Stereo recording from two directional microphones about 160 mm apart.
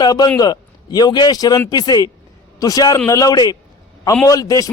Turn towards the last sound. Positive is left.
turn(degrees=20)  # may be behind; listen again after turning